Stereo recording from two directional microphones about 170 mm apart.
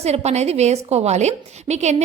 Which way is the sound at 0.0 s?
40° right (ahead or behind).